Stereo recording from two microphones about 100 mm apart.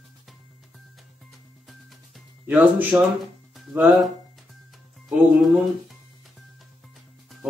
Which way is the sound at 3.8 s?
Centre (ahead or behind).